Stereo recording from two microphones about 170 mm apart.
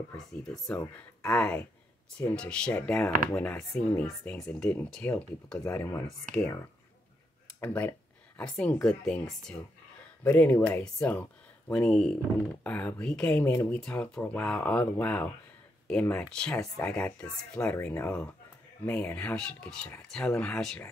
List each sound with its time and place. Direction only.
0.2 s speech: 5° left (ahead or behind)
7.6 s speech: 10° left (ahead or behind)
10.2 s speech: 10° left (ahead or behind)
16.5 s speech: 15° left (ahead or behind)